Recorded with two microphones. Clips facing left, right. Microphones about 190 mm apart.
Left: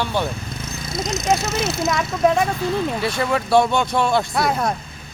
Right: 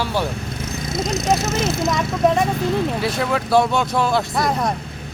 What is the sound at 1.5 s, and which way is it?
Speech, 50° right (ahead or behind).